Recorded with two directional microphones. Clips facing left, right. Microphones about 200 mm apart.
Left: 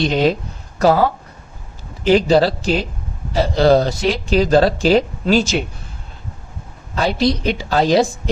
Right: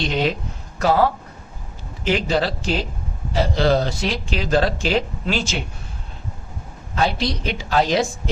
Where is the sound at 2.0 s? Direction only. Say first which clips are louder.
Left 8 dB; 35° left (ahead or behind).